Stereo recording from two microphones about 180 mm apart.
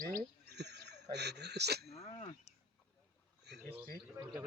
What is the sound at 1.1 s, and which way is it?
Speech, 70° right (ahead or behind).